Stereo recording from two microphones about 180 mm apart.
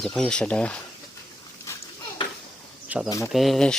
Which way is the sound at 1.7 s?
15° left (ahead or behind).